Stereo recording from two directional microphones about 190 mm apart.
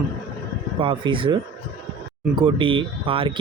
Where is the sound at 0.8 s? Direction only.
25° right (ahead or behind).